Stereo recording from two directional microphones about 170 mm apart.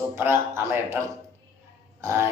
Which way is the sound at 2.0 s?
15° right (ahead or behind).